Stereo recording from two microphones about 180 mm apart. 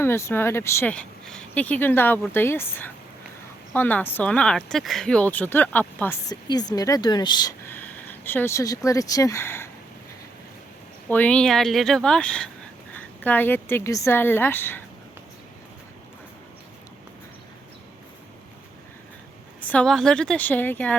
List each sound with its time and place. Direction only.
0.0 s speech: 15° left (ahead or behind)
6.2 s speech: 20° left (ahead or behind)
7.7 s speech: 10° left (ahead or behind)
11.1 s speech: 5° left (ahead or behind)
19.6 s speech: 5° left (ahead or behind)